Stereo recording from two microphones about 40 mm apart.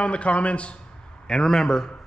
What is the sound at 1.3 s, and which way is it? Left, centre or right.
Speech, centre.